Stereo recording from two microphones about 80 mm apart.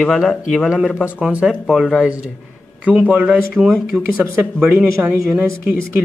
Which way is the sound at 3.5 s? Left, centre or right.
Centre.